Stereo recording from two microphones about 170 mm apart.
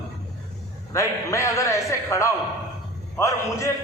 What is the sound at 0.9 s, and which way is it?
A man's voice, 15° left (ahead or behind).